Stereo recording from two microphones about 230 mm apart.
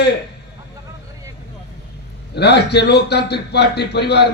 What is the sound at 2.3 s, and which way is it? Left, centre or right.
A man's voice, left.